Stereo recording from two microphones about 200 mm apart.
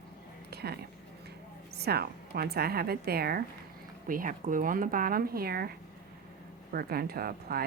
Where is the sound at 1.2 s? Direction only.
55° right (ahead or behind).